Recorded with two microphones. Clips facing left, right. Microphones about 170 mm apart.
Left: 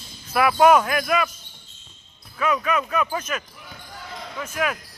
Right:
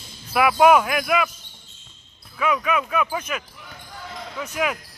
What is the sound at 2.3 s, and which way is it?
Speech, 10° right (ahead or behind).